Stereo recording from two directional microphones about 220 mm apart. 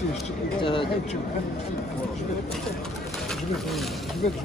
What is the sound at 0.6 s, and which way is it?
Speech, 25° left (ahead or behind).